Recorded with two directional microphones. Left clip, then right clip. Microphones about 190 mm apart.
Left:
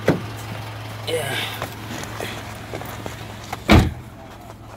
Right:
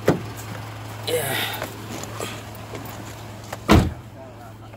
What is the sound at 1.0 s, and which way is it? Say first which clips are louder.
Vehicle: even; 25° right (ahead or behind).